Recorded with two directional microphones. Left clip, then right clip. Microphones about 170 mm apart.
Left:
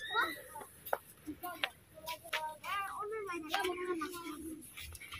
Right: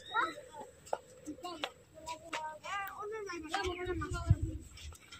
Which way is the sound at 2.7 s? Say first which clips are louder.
Left 2 dB; 55° left (ahead or behind).